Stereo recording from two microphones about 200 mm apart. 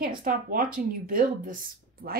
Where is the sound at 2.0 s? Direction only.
90° right.